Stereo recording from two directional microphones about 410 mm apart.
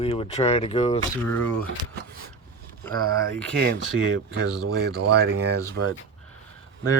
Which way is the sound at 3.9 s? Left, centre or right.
Right.